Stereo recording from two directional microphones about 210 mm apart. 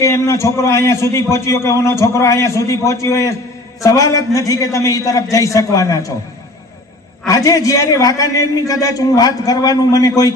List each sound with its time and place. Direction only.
0.0 s a man's voice: 15° left (ahead or behind)
7.2 s a man's voice: 15° left (ahead or behind)